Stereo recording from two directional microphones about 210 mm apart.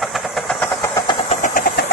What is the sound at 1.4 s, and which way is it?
Engine, 45° left (ahead or behind).